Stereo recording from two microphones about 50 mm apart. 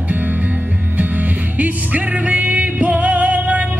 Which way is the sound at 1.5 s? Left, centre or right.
Right.